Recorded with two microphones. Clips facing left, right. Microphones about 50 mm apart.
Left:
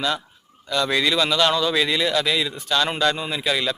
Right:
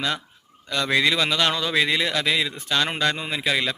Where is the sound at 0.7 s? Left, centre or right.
Right.